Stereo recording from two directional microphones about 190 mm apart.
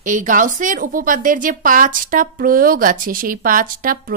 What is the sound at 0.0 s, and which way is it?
A woman's voice, 45° right (ahead or behind).